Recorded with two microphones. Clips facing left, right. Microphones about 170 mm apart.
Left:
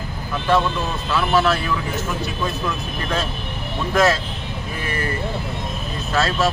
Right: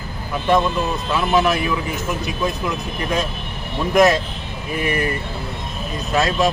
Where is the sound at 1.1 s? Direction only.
15° right (ahead or behind).